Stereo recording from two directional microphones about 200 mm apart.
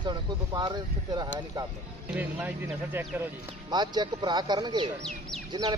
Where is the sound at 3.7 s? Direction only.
20° right (ahead or behind).